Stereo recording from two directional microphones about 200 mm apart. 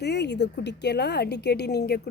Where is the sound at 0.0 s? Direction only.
55° left (ahead or behind).